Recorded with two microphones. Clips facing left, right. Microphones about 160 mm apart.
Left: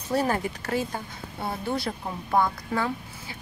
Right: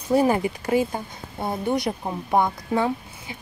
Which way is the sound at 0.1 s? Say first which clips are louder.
Right 6 dB; 10° right (ahead or behind).